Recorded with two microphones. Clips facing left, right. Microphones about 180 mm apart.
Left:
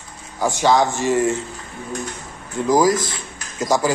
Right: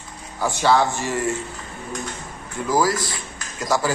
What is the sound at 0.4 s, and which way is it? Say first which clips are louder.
Speech: left 2 dB; 15° left (ahead or behind).